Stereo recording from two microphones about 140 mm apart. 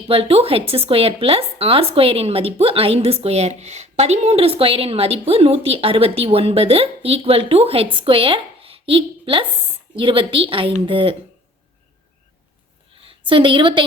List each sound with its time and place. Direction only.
0.1 s a woman's voice: 45° right (ahead or behind)
13.0 s a woman's voice: 40° right (ahead or behind)